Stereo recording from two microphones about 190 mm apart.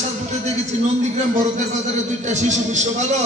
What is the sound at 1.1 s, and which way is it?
A man's voice, 40° right (ahead or behind).